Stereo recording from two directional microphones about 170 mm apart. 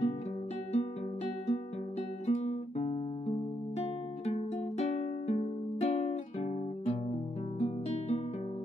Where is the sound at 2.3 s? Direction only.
40° left (ahead or behind).